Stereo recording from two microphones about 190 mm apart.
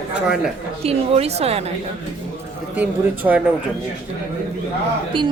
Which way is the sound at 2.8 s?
10° right (ahead or behind).